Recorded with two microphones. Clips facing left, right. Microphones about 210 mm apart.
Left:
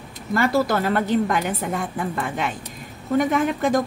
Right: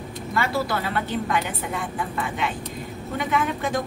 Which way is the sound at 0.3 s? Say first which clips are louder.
Left 5 dB; 45° left (ahead or behind).